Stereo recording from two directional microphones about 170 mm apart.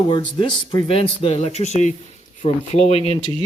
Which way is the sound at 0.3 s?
30° left (ahead or behind).